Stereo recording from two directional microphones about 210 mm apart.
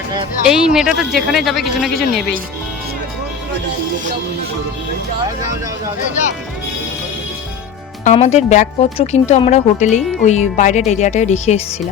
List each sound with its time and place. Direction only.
0.4 s speech: 5° right (ahead or behind)
8.0 s speech: 30° left (ahead or behind)